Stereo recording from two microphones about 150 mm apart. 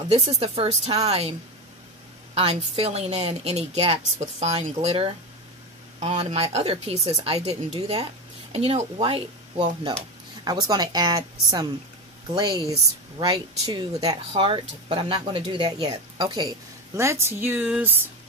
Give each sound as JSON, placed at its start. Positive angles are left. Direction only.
{"t": 0.1, "sound": "speech", "side_deg": -45}
{"t": 2.3, "sound": "a woman's voice", "side_deg": -40}